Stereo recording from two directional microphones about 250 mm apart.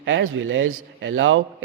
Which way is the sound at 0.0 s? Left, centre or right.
Right.